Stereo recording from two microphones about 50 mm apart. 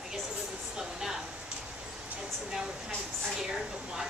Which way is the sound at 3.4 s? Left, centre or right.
Centre.